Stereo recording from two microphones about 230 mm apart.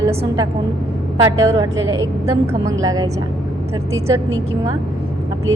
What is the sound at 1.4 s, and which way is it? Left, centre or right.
A woman's voice, centre.